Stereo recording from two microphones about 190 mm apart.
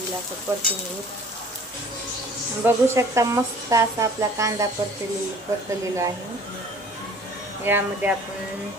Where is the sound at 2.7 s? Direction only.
15° right (ahead or behind).